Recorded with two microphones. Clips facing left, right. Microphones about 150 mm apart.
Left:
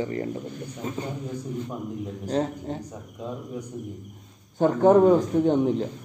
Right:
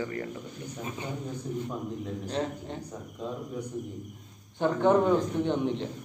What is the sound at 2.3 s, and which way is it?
Speech, 40° left (ahead or behind).